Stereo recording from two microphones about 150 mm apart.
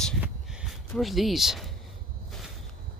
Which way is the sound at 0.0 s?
Centre (ahead or behind).